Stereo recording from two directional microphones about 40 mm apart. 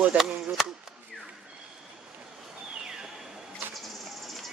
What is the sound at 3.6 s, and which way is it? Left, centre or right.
Printer, right.